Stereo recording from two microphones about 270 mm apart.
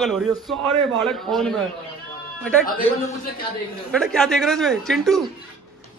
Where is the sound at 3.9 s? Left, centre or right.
Centre.